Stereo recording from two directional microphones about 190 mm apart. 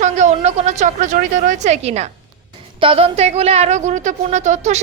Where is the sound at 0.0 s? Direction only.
40° right (ahead or behind).